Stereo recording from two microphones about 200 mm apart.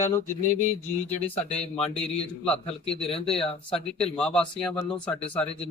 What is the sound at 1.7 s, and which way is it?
Speech, 30° left (ahead or behind).